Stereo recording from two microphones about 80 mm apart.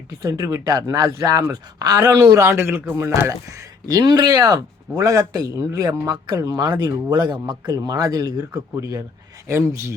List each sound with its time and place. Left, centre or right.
0.2 s speech: right
2.0 s speech: right
7.7 s speech: right
9.5 s speech: right